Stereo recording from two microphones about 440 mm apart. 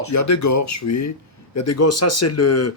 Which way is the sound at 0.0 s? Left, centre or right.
Left.